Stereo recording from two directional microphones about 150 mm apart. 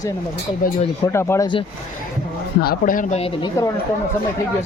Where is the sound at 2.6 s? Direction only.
80° left.